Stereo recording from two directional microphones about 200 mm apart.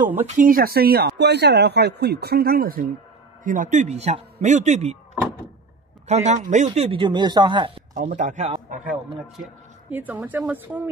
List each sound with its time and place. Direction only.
0.0 s speech: 10° right (ahead or behind)
0.4 s a man's voice: 45° right (ahead or behind)
6.0 s a man's voice: 35° right (ahead or behind)
8.2 s a man's voice: 40° right (ahead or behind)
8.9 s speech: 10° right (ahead or behind)